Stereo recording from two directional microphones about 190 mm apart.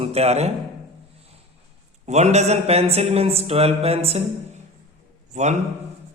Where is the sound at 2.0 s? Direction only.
35° right (ahead or behind).